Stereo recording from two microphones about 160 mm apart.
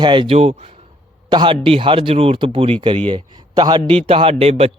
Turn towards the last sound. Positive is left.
turn(degrees=-40)  # may be behind; listen again after turning